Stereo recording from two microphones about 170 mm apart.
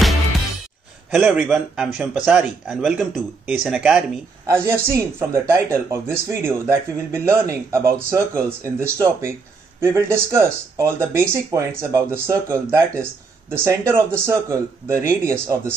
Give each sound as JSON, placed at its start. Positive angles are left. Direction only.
{"t": 1.1, "sound": "a man's voice", "side_deg": -5}